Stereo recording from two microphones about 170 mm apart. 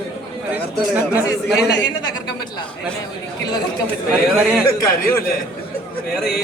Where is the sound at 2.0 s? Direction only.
25° left (ahead or behind).